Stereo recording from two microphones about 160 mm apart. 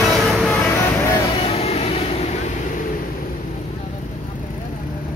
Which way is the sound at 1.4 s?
40° left (ahead or behind).